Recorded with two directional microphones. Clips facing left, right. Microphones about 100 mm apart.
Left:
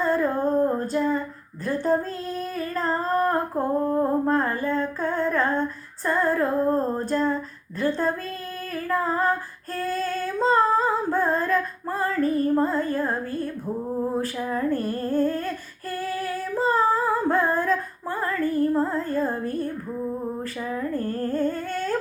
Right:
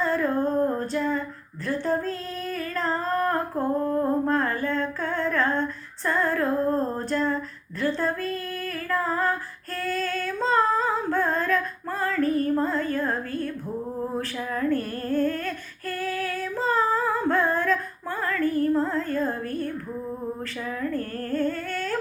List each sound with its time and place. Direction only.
0.0 s female singing: 15° left (ahead or behind)
1.6 s humming: 15° left (ahead or behind)
3.0 s humming: 15° left (ahead or behind)
10.0 s singing: 15° left (ahead or behind)
10.5 s female singing: 10° left (ahead or behind)
12.2 s humming: 10° left (ahead or behind)
14.2 s speech: 15° left (ahead or behind)
15.1 s humming: 15° left (ahead or behind)
16.0 s singing: 10° left (ahead or behind)
19.4 s speech: 20° left (ahead or behind)